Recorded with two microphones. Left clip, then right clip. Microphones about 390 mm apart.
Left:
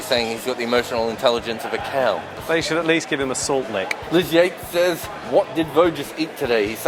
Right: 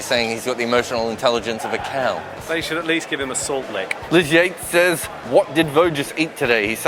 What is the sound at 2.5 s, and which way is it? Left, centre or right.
Speech, left.